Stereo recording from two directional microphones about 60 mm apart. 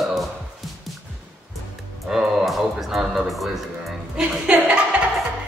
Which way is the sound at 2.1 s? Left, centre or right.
Centre.